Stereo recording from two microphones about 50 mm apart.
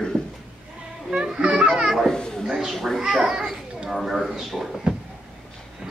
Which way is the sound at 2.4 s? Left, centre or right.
Centre.